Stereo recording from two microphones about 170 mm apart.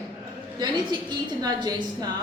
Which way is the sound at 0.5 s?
25° right (ahead or behind).